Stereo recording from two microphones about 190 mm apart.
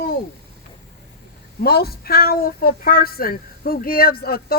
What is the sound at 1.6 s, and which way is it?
Speech, 55° left (ahead or behind).